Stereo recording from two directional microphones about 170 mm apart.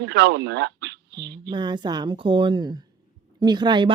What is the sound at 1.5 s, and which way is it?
A woman's voice, 25° right (ahead or behind).